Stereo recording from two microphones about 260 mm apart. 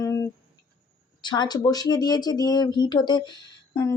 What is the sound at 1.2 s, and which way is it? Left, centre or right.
Speech, centre.